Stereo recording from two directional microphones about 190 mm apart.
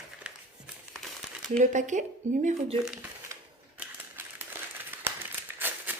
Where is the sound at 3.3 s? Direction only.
10° right (ahead or behind).